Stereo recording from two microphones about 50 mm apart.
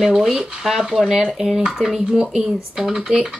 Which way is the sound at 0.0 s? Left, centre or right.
Centre.